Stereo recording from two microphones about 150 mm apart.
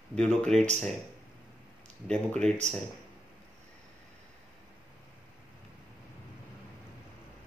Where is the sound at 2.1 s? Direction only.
5° left (ahead or behind).